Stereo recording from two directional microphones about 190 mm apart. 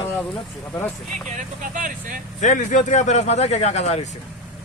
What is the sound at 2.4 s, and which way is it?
Speech, 40° left (ahead or behind).